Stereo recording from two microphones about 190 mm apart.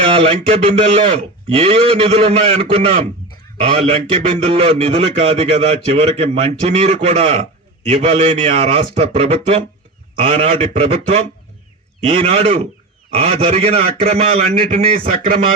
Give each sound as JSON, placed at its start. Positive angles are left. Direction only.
{"t": 0.0, "sound": "a man's voice", "side_deg": -30}